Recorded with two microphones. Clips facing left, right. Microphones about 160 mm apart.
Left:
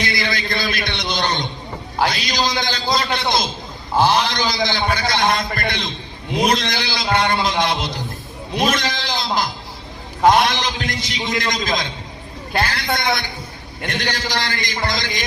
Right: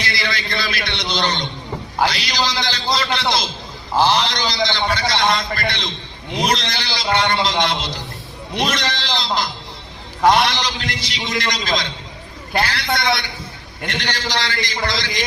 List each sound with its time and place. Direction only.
0.0 s a man's voice: 50° left (ahead or behind)
9.0 s a man's voice: 50° left (ahead or behind)